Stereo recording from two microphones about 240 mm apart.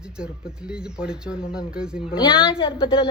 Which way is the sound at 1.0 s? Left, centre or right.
Centre.